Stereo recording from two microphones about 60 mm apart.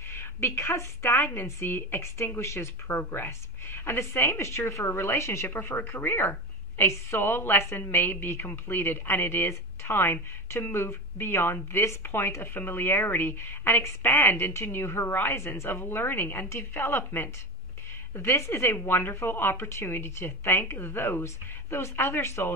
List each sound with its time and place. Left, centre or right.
0.1 s a woman's voice: left
18.1 s a woman's voice: left